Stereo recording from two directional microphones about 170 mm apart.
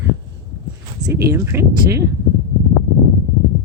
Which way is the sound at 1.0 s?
15° right (ahead or behind).